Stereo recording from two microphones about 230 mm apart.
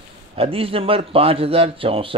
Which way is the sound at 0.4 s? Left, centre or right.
Right.